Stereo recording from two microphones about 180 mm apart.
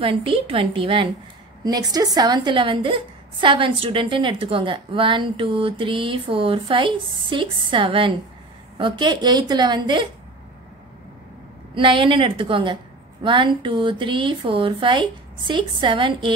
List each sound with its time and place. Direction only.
0.0 s a woman's voice: 30° right (ahead or behind)
11.7 s a woman's voice: 30° right (ahead or behind)